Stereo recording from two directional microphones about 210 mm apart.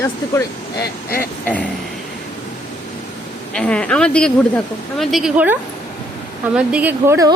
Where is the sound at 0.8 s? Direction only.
45° left (ahead or behind).